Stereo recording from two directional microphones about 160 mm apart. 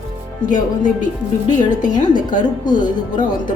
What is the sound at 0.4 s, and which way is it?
Speech, 50° left (ahead or behind).